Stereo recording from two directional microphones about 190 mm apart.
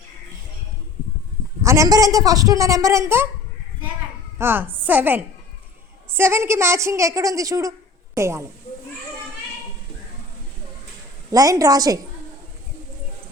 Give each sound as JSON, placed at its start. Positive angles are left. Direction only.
{"t": 1.6, "sound": "a woman's voice", "side_deg": -15}
{"t": 4.4, "sound": "a woman's voice", "side_deg": -10}
{"t": 11.3, "sound": "a woman's voice", "side_deg": -20}